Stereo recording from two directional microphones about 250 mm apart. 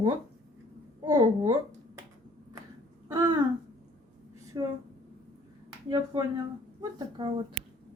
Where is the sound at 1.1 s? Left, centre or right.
Centre.